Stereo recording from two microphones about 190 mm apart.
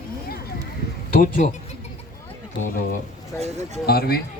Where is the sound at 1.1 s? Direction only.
45° left (ahead or behind).